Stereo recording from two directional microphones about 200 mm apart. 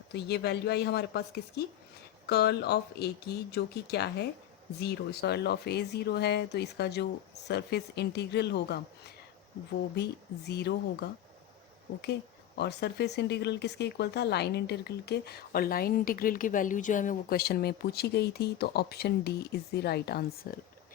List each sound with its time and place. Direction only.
0.1 s speech: 55° left (ahead or behind)
12.5 s speech: 55° left (ahead or behind)